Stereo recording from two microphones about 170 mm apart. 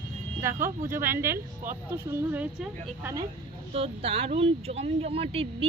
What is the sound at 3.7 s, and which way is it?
Speech, 35° right (ahead or behind).